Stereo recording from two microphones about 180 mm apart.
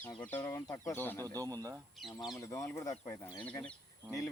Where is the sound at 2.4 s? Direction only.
15° left (ahead or behind).